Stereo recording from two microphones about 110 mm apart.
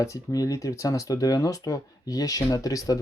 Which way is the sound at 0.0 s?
30° left (ahead or behind).